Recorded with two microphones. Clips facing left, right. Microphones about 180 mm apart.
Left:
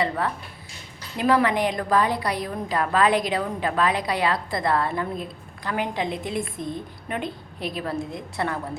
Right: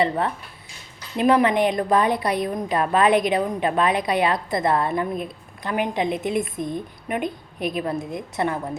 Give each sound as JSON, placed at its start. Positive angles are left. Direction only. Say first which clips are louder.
{"t": 1.1, "sound": "a woman's voice", "louder": "right 3 dB", "side_deg": -20}